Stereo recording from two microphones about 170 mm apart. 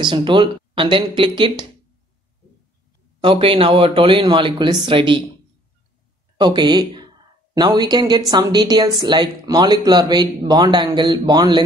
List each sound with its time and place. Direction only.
0.0 s speech: 30° right (ahead or behind)
3.2 s speech: 30° right (ahead or behind)
6.4 s speech: 25° right (ahead or behind)